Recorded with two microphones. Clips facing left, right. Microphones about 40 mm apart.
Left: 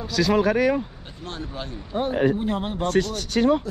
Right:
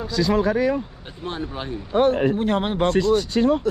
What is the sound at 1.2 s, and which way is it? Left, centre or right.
Speech, centre.